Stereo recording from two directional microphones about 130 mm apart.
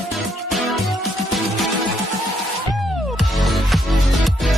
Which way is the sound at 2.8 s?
Centre (ahead or behind).